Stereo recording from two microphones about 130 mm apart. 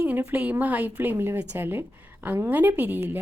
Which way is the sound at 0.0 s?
15° right (ahead or behind).